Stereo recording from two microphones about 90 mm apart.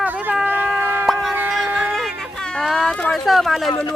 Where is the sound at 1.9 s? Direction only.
5° left (ahead or behind).